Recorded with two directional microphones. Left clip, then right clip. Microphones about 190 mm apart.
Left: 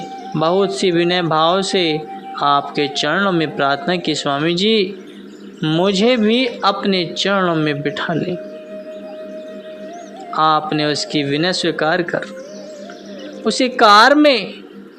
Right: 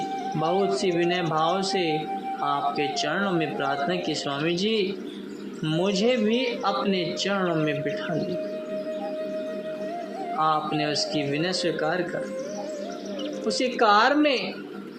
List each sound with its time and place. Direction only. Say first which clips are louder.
0.3 s speech: left 9 dB; 45° left (ahead or behind)
10.3 s speech: left 9 dB; 45° left (ahead or behind)
13.4 s speech: left 10 dB; 45° left (ahead or behind)